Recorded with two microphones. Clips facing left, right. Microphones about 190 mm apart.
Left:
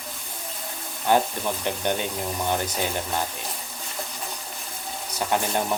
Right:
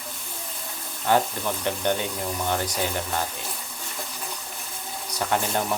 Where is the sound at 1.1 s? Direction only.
15° left (ahead or behind).